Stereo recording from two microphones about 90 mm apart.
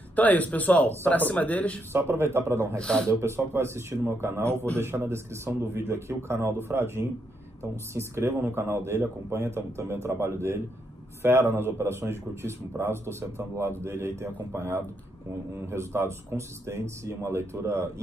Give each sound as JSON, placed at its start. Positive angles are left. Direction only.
{"t": 0.1, "sound": "speech", "side_deg": 20}
{"t": 1.9, "sound": "a man's voice", "side_deg": -25}
{"t": 2.8, "sound": "speech", "side_deg": 10}
{"t": 3.1, "sound": "a man's voice", "side_deg": -30}